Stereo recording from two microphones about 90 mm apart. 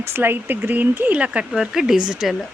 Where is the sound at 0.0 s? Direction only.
25° right (ahead or behind); by 2.3 s 5° right (ahead or behind).